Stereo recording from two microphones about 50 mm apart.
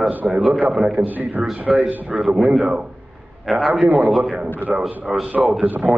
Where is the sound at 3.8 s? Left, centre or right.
Right.